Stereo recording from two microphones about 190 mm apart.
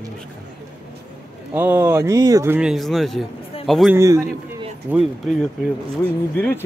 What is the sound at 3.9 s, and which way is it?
Speech, 15° right (ahead or behind).